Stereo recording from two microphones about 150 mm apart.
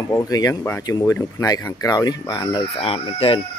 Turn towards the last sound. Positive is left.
turn(degrees=35)  # may be behind; listen again after turning